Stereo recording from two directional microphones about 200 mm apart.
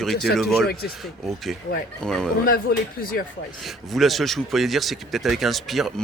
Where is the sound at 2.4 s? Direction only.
45° left (ahead or behind).